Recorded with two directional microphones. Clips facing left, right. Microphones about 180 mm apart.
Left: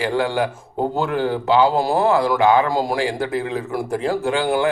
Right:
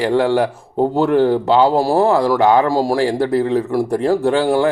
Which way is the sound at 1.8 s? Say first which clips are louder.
Right 3 dB; 30° right (ahead or behind).